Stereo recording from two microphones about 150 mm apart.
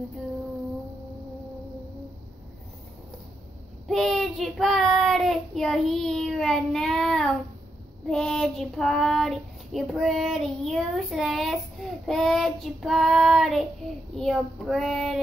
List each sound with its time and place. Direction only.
3.8 s child singing: centre (ahead or behind)